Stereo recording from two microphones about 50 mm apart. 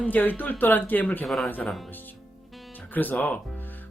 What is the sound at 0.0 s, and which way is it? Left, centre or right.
Speech, left.